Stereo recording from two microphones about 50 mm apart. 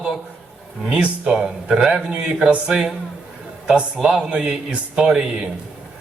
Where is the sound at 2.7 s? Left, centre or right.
Centre.